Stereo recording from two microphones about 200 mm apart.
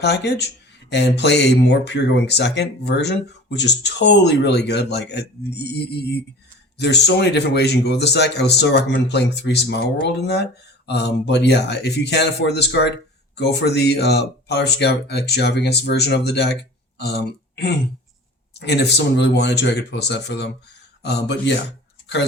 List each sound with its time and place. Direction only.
0.0 s speech: 55° left (ahead or behind)